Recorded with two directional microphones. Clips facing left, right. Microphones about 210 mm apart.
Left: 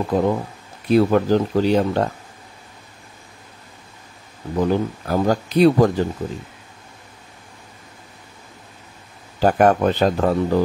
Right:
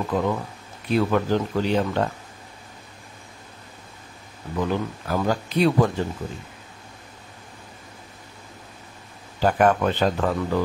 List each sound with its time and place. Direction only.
0.1 s speech: 35° left (ahead or behind)
4.6 s speech: 40° left (ahead or behind)
9.4 s speech: 40° left (ahead or behind)